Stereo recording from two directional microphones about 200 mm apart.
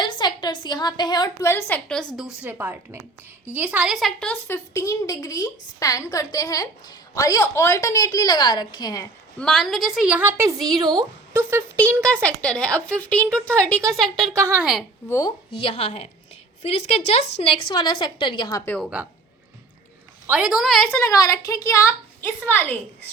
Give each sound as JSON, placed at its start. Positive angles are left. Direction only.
{"t": 0.0, "sound": "a woman's voice", "side_deg": 20}
{"t": 2.1, "sound": "a woman's voice", "side_deg": -5}
{"t": 9.4, "sound": "a woman's voice", "side_deg": 5}
{"t": 12.0, "sound": "a woman's voice", "side_deg": 5}
{"t": 14.3, "sound": "a woman's voice", "side_deg": -10}
{"t": 15.6, "sound": "a woman's voice", "side_deg": 30}
{"t": 20.2, "sound": "speech", "side_deg": -5}